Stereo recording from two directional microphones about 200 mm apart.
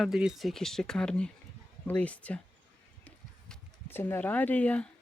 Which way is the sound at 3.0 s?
10° left (ahead or behind).